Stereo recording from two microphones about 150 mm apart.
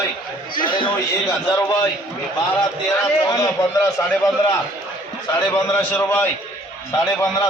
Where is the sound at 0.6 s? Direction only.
65° left (ahead or behind).